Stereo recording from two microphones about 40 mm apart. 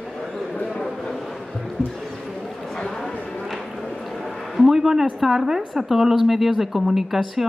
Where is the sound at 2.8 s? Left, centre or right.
Centre.